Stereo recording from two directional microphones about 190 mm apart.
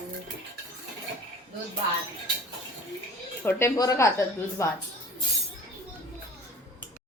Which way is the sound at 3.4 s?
15° left (ahead or behind).